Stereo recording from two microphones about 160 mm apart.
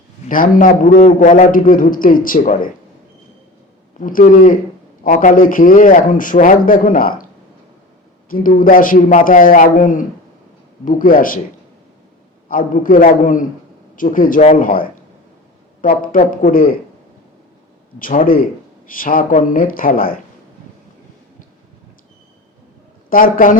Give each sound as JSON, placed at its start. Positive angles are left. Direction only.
{"t": 0.3, "sound": "a man's voice", "side_deg": 60}
{"t": 4.0, "sound": "a man's voice", "side_deg": 55}
{"t": 8.3, "sound": "a man's voice", "side_deg": 60}
{"t": 12.5, "sound": "a man's voice", "side_deg": 60}
{"t": 18.0, "sound": "a man's voice", "side_deg": 60}
{"t": 23.0, "sound": "a man's voice", "side_deg": 60}